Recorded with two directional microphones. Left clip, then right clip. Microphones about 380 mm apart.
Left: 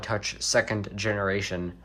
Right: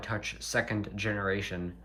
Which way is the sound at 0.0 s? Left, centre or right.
Centre.